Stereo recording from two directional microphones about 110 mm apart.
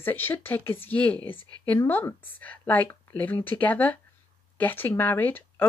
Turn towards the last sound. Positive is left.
turn(degrees=15)  # may be behind; listen again after turning